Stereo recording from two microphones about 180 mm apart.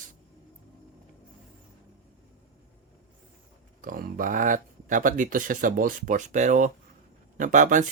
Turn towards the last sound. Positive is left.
turn(degrees=-45)  # may be behind; listen again after turning